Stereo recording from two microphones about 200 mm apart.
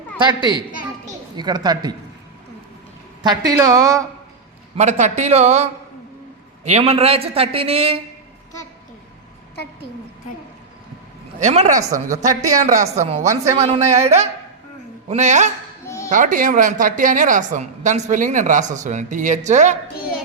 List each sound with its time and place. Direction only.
0.2 s speech: 20° right (ahead or behind)
3.2 s speech: 20° right (ahead or behind)
4.8 s a woman's voice: 35° right (ahead or behind)
6.7 s speech: 30° right (ahead or behind)
11.3 s a woman's voice: 35° right (ahead or behind)
11.8 s speech: 15° right (ahead or behind)
12.5 s a woman's voice: 40° right (ahead or behind)